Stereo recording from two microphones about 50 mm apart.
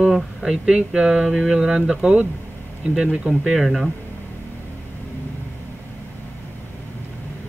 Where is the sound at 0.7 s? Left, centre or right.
Centre.